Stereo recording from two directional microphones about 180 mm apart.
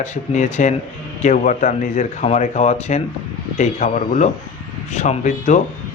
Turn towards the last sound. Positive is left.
turn(degrees=45)  # may be behind; listen again after turning